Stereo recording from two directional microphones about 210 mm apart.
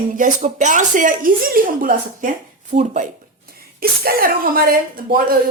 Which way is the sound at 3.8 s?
45° right (ahead or behind).